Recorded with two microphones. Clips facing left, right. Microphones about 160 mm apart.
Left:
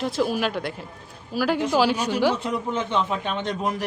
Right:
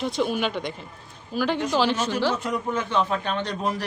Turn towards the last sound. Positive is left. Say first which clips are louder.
# even
turn(degrees=20)  # may be behind; listen again after turning